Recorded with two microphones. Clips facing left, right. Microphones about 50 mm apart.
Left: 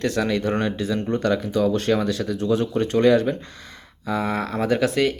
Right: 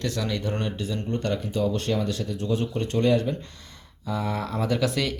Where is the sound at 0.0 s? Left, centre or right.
Left.